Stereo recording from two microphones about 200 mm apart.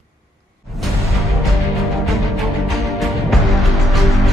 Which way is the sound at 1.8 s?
Centre (ahead or behind).